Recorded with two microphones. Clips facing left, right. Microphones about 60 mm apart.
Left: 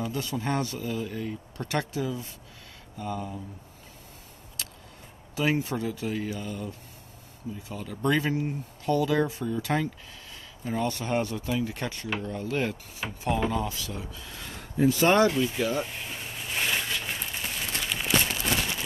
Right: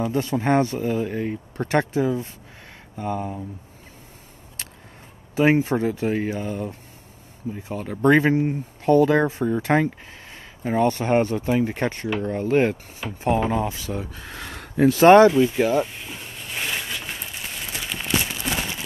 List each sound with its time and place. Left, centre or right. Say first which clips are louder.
0.0 s speech: right 8 dB; right
5.3 s speech: right 8 dB; right
14.1 s speech: right 5 dB; right
15.2 s speech: right 8 dB; right
15.8 s a sound: right 5 dB; centre